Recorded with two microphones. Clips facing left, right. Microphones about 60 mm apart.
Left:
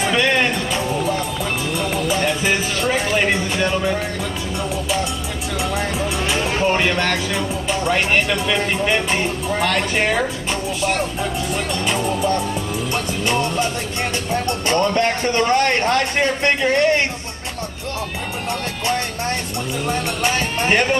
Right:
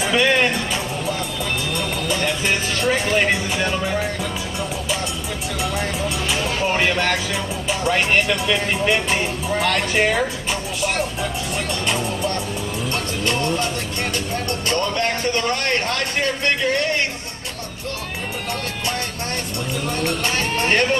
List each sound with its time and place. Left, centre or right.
0.1 s music: centre
1.7 s music: centre
5.6 s music: centre
11.5 s music: centre
12.9 s speech: centre
14.7 s a man's voice: left
20.2 s speech: centre